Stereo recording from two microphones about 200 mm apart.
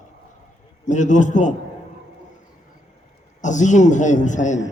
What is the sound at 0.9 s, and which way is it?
Speech, 40° left (ahead or behind).